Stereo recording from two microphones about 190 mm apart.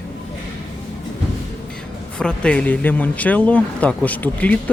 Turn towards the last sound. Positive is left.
turn(degrees=10)  # may be behind; listen again after turning